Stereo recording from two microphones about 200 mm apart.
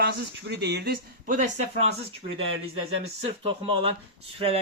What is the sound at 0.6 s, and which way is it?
Speech, 55° right (ahead or behind).